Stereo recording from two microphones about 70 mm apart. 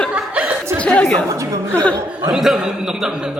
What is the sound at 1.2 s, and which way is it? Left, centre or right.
Speech, right.